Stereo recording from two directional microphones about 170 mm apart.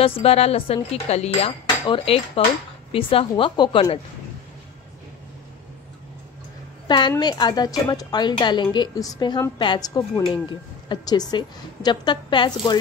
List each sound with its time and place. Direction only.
0.0 s dishes: 35° left (ahead or behind)
6.9 s a woman's voice: 25° left (ahead or behind)